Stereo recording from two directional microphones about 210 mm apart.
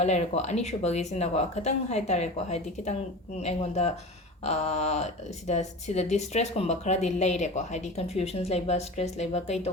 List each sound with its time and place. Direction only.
0.0 s speech: 30° left (ahead or behind)